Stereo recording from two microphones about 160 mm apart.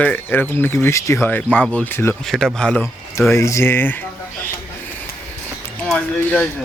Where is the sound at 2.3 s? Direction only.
Centre (ahead or behind).